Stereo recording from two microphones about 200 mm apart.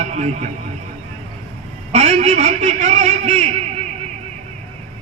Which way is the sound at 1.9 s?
35° right (ahead or behind).